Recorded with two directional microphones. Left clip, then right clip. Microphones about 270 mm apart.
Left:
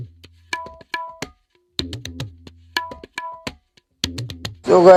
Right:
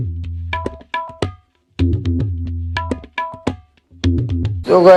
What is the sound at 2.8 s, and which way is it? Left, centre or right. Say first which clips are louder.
Tabla: even; left.